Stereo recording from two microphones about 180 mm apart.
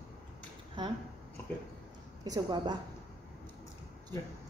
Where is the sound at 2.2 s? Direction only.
20° right (ahead or behind).